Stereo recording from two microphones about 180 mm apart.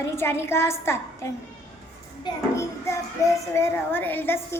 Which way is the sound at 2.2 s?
15° left (ahead or behind).